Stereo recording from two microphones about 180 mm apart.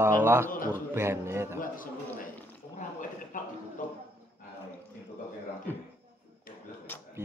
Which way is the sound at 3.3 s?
45° left (ahead or behind).